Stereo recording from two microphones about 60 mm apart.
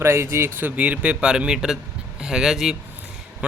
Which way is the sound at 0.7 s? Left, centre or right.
Right.